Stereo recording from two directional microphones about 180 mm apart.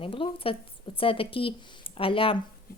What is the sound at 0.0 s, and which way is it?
Speech, 30° left (ahead or behind).